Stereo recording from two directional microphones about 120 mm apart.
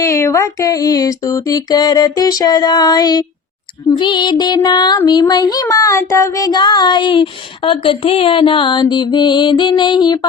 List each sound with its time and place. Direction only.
0.0 s child singing: 25° left (ahead or behind)